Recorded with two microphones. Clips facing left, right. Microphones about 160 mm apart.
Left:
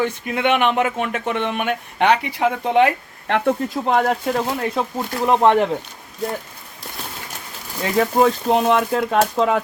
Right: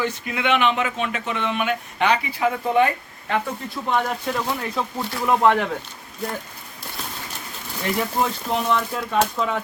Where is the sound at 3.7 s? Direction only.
40° left (ahead or behind).